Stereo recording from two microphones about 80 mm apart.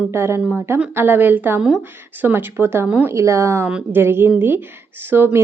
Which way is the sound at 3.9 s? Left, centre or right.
Right.